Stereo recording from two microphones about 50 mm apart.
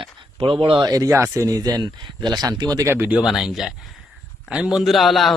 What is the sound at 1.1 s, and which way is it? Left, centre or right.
Speech, right.